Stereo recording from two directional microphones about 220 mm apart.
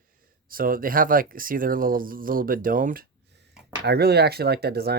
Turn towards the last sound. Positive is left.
turn(degrees=-45)  # may be behind; listen again after turning